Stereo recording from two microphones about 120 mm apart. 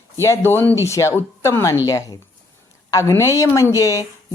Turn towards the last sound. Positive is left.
turn(degrees=25)  # may be behind; listen again after turning